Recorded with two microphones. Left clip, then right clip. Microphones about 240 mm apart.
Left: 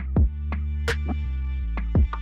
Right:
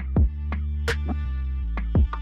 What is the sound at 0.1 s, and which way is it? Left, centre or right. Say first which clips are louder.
Music: even; centre.